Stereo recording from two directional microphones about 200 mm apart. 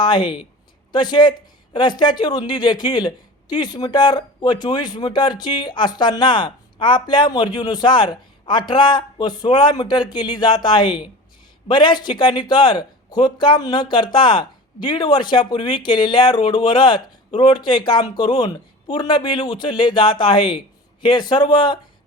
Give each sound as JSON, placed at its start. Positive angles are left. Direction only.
{"t": 0.0, "sound": "a man's voice", "side_deg": 20}